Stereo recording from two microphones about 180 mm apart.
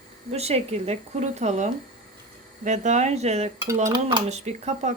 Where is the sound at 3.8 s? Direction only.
25° right (ahead or behind).